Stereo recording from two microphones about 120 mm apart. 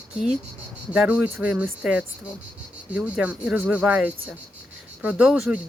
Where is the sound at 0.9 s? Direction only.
10° right (ahead or behind).